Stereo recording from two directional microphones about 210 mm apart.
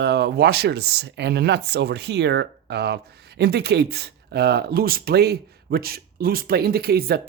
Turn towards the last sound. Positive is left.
turn(degrees=-45)  # may be behind; listen again after turning